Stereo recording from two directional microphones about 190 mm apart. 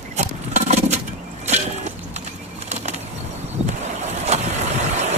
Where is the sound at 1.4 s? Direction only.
35° right (ahead or behind).